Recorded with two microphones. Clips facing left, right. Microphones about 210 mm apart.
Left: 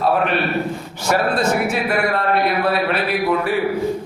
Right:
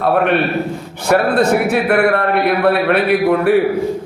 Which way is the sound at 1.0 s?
60° right (ahead or behind).